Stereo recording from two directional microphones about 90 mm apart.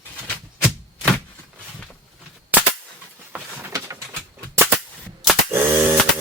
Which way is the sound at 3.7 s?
35° right (ahead or behind).